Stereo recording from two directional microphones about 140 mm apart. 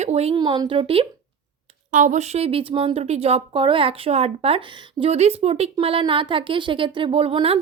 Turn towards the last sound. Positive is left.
turn(degrees=-40)  # may be behind; listen again after turning